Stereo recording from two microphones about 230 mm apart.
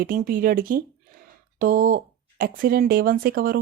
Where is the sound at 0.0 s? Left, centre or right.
Right.